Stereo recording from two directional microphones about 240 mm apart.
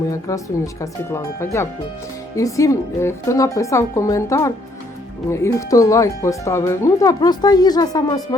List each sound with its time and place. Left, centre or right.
0.1 s speech: centre